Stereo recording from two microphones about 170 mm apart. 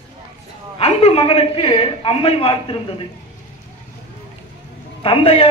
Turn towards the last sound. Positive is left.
turn(degrees=35)  # may be behind; listen again after turning